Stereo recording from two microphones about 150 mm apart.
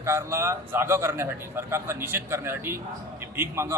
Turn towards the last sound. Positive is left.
turn(degrees=-15)  # may be behind; listen again after turning